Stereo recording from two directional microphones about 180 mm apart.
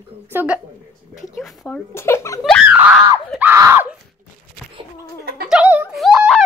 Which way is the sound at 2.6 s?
10° right (ahead or behind).